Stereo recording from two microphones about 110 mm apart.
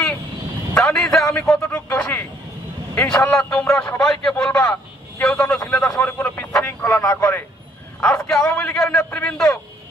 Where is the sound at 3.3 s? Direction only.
10° left (ahead or behind).